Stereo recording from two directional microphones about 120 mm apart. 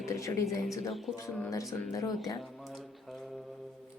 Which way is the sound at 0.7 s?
Centre (ahead or behind).